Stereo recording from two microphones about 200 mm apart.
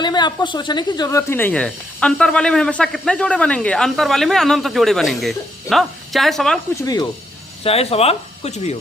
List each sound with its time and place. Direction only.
0.0 s speech: 20° left (ahead or behind); by 6.6 s centre (ahead or behind)
6.8 s speech: 20° left (ahead or behind)
7.6 s speech: 30° left (ahead or behind)